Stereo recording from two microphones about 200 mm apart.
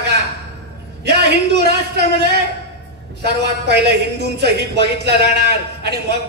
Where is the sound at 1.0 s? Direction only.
55° right (ahead or behind).